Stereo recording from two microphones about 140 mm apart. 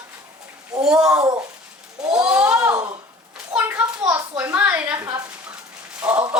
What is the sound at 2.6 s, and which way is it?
A woman's voice, 25° right (ahead or behind).